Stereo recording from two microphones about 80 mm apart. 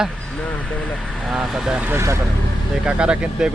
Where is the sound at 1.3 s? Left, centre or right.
Centre.